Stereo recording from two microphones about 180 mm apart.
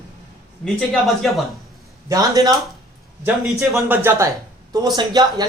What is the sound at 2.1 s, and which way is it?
Speech, 20° right (ahead or behind).